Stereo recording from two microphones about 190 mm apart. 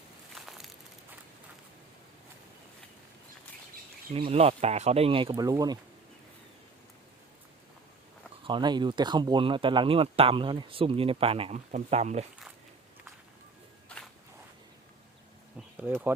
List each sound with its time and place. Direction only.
0.3 s a sound: centre (ahead or behind)
4.1 s speech: 30° right (ahead or behind)
8.4 s speech: 25° right (ahead or behind)
13.8 s walk: 5° left (ahead or behind)
15.5 s insect: 5° right (ahead or behind)